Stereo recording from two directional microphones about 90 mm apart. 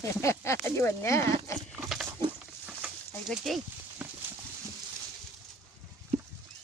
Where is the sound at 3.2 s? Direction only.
Centre (ahead or behind).